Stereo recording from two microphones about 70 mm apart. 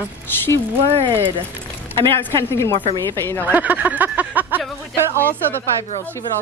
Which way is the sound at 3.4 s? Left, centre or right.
Right.